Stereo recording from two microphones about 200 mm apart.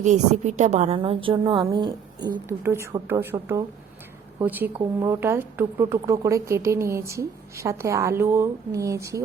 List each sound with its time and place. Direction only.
0.0 s a woman's voice: 35° right (ahead or behind); by 9.2 s 15° right (ahead or behind)